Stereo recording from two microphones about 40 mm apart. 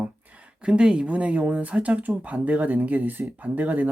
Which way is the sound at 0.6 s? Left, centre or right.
Right.